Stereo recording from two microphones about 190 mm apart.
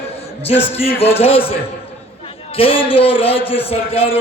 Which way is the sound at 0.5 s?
10° left (ahead or behind).